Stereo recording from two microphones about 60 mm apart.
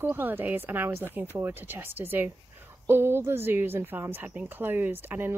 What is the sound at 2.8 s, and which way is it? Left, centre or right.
Speech, right.